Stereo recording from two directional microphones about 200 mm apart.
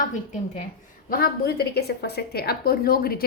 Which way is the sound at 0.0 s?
40° left (ahead or behind).